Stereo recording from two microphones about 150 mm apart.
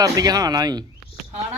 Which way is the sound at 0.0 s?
25° right (ahead or behind).